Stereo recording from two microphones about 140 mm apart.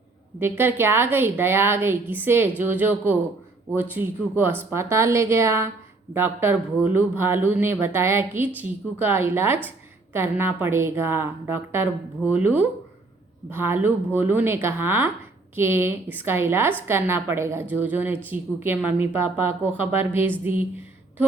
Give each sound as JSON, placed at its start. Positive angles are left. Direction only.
{"t": 0.3, "sound": "a woman's voice", "side_deg": -15}